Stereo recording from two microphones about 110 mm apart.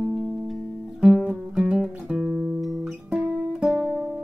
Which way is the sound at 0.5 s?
Centre (ahead or behind).